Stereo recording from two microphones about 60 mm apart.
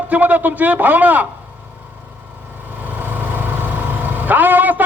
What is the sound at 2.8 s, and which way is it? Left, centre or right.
Vehicle, right.